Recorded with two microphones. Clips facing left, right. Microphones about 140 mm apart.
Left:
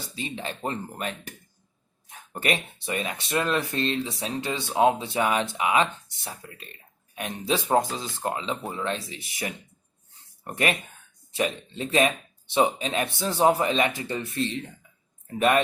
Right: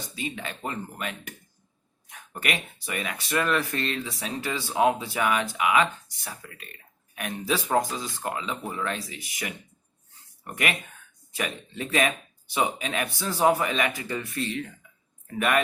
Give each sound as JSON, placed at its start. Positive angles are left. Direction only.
{"t": 0.0, "sound": "speech", "side_deg": 30}